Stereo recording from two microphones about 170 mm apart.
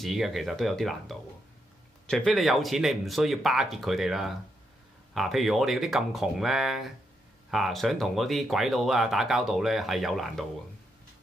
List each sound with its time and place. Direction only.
0.0 s speech: centre (ahead or behind)